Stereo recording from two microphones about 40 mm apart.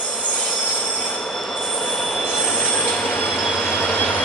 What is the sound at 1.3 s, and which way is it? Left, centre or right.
Train, centre.